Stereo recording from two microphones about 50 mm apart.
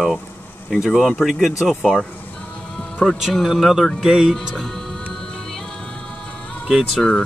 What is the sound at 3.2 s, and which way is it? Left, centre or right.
Speech, centre.